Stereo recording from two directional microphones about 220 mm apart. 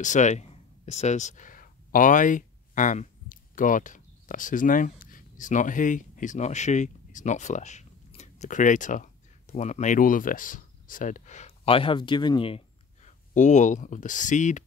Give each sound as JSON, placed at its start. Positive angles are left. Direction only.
{"t": 0.0, "sound": "speech", "side_deg": 35}